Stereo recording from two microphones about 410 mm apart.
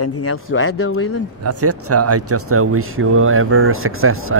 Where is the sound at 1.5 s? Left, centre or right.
Right.